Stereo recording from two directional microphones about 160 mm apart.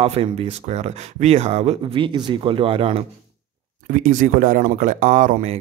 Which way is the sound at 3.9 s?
55° right (ahead or behind).